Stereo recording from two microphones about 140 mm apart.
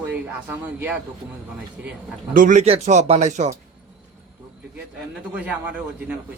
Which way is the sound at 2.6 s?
50° right (ahead or behind).